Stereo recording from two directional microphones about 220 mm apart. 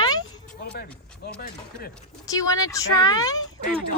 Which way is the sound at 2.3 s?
15° left (ahead or behind).